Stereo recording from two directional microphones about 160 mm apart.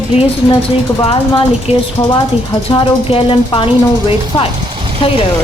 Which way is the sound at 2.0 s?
20° left (ahead or behind).